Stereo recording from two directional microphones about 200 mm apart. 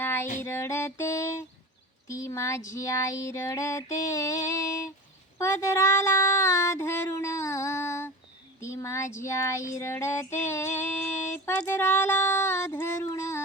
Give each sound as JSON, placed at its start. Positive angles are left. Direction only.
{"t": 0.0, "sound": "music", "side_deg": 10}
{"t": 0.3, "sound": "a sound", "side_deg": 15}
{"t": 2.0, "sound": "female singing", "side_deg": 15}
{"t": 5.4, "sound": "child singing", "side_deg": 15}
{"t": 8.6, "sound": "female singing", "side_deg": 15}
{"t": 11.4, "sound": "a sound", "side_deg": 10}